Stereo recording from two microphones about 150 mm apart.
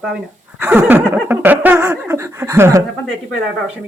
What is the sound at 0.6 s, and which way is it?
Laughter, 15° right (ahead or behind).